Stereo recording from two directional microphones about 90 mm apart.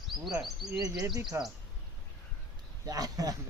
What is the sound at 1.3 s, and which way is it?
Speech, 30° right (ahead or behind).